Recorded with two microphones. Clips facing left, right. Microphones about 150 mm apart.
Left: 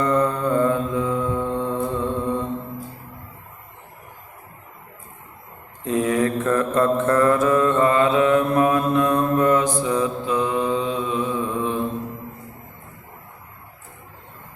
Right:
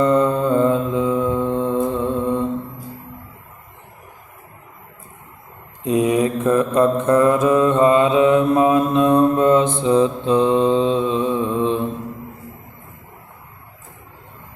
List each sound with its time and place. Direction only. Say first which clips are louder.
0.0 s mantra: right 4 dB; 20° right (ahead or behind)
5.8 s mantra: right 3 dB; 20° right (ahead or behind)